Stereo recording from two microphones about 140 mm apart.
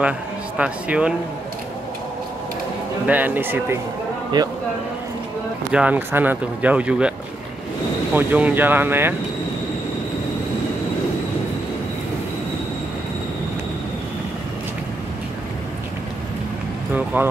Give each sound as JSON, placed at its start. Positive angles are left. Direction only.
{"t": 0.6, "sound": "speech", "side_deg": -10}
{"t": 3.1, "sound": "speech", "side_deg": -10}
{"t": 4.3, "sound": "speech", "side_deg": -30}
{"t": 5.7, "sound": "speech", "side_deg": -10}
{"t": 8.1, "sound": "speech", "side_deg": -15}
{"t": 16.9, "sound": "speech", "side_deg": -10}